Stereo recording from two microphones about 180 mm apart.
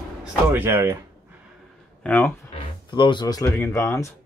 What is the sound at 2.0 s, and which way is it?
Speech, 10° left (ahead or behind).